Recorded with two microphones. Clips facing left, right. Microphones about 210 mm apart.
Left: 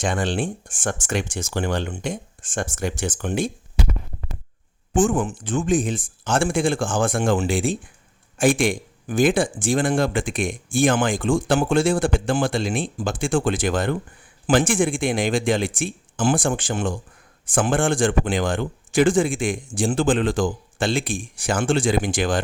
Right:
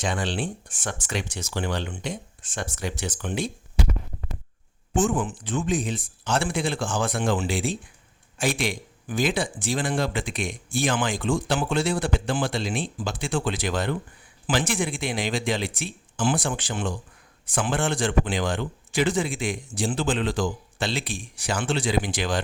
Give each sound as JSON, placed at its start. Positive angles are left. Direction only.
{"t": 0.0, "sound": "speech", "side_deg": 50}
{"t": 4.9, "sound": "speech", "side_deg": 45}